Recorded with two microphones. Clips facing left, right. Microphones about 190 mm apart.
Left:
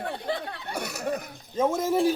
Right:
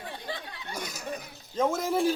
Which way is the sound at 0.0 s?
60° left (ahead or behind).